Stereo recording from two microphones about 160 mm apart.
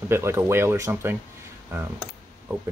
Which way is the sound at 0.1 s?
15° right (ahead or behind).